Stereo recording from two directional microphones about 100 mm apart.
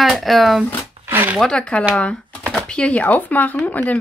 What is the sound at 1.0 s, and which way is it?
Chopping, 20° right (ahead or behind).